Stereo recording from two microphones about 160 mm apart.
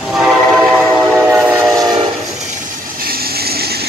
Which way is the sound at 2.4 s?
50° right (ahead or behind).